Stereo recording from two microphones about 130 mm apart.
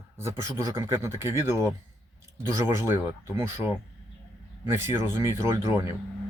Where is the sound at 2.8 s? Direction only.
20° right (ahead or behind).